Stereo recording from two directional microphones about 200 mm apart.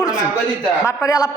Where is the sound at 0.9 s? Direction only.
15° left (ahead or behind).